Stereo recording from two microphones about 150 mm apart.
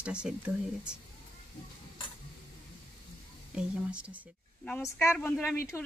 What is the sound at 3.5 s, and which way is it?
Speech, 5° right (ahead or behind).